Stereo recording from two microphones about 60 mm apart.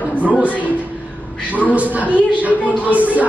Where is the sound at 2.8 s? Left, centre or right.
Right.